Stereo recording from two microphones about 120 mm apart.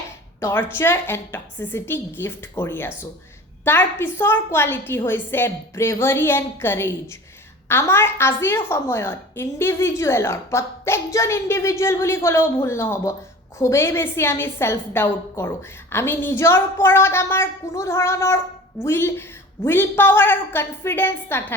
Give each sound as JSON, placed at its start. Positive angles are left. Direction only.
{"t": 0.3, "sound": "a woman's voice", "side_deg": 20}